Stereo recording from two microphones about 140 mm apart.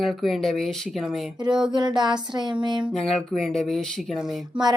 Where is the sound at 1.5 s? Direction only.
35° right (ahead or behind).